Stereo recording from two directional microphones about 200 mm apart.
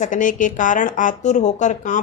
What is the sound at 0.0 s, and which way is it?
Speech, 40° left (ahead or behind).